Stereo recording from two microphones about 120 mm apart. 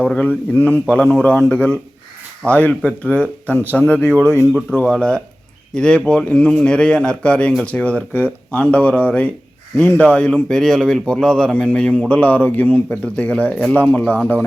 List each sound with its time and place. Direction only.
0.0 s a man's voice: 10° left (ahead or behind)
9.7 s speech: 20° left (ahead or behind)
10.0 s a man's voice: 10° left (ahead or behind)